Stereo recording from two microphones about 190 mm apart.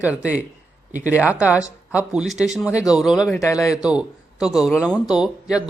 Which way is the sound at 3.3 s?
15° left (ahead or behind).